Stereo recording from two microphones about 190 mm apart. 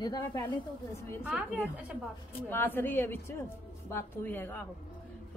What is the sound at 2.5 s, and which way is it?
A woman's voice, 10° left (ahead or behind).